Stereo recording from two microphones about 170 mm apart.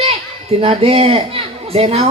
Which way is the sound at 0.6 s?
35° right (ahead or behind).